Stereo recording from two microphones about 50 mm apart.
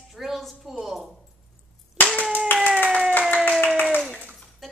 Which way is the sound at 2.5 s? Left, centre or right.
Left.